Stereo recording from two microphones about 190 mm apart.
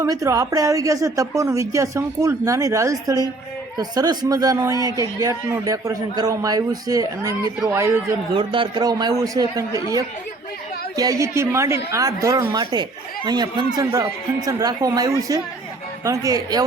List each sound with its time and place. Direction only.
0.0 s a woman's voice: 15° right (ahead or behind)
8.4 s a woman's voice: 25° right (ahead or behind)